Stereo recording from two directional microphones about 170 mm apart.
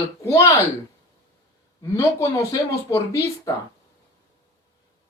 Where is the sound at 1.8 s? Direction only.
20° left (ahead or behind).